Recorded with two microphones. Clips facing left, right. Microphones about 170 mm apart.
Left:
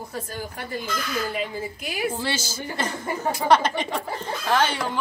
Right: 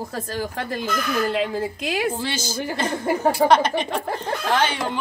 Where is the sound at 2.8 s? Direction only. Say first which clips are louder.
Right 8 dB; 60° right (ahead or behind).